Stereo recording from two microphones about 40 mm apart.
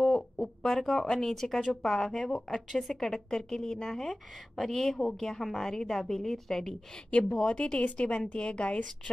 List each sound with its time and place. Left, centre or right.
0.0 s a sound: centre
1.1 s a woman's voice: centre
7.1 s a woman's voice: left